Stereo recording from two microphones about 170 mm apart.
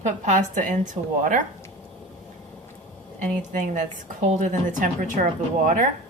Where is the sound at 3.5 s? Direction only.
45° right (ahead or behind).